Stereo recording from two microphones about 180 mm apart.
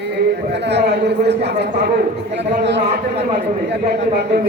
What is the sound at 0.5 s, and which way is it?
A man's voice, 70° right (ahead or behind).